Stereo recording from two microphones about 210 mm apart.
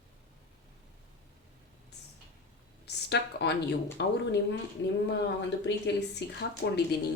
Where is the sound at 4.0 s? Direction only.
55° left (ahead or behind).